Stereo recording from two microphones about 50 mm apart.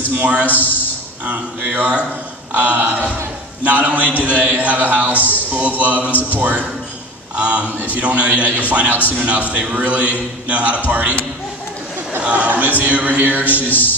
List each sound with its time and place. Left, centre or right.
0.2 s a man's voice: right
0.5 s speech: left
1.2 s a man's voice: right
5.1 s speech: left
5.5 s a man's voice: right
6.0 s speech: left
6.4 s a man's voice: right
12.2 s a man's voice: right
13.7 s speech: left